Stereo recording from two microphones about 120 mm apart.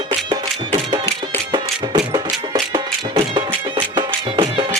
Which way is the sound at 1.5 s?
40° right (ahead or behind).